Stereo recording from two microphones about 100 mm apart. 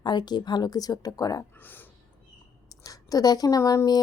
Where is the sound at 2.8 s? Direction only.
35° left (ahead or behind).